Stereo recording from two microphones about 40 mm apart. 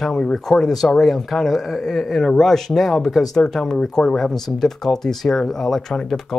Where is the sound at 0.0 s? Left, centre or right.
Centre.